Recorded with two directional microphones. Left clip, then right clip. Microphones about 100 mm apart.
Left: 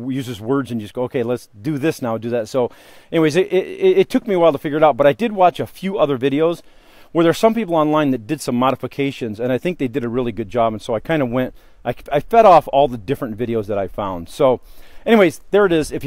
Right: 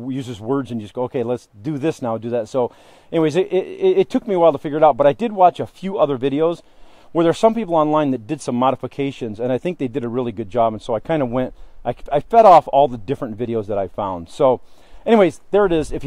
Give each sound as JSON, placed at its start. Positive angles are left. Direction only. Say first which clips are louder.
{"t": 0.0, "sound": "speech", "louder": "left 2 dB", "side_deg": 30}